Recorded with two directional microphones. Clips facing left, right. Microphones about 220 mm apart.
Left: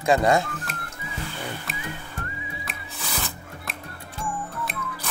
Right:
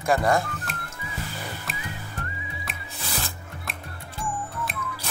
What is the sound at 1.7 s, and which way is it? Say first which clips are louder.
Whistling: left 1 dB; centre (ahead or behind).